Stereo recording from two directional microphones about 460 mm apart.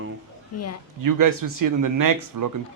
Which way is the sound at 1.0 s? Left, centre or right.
Right.